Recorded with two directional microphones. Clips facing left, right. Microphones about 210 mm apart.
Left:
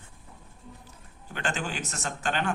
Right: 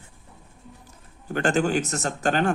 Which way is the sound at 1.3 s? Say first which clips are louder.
Right 11 dB; 45° right (ahead or behind).